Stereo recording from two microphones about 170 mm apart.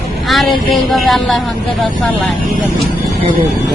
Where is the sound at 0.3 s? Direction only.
Centre (ahead or behind).